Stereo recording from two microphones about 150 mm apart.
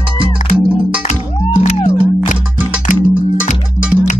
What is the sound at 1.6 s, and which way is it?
Music, 50° left (ahead or behind).